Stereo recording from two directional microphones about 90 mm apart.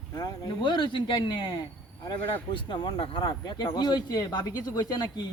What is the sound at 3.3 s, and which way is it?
Speech, 50° left (ahead or behind).